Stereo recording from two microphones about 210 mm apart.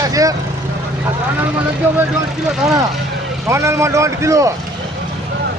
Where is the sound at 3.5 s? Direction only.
15° right (ahead or behind).